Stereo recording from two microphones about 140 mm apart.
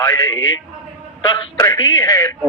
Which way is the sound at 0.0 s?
20° left (ahead or behind).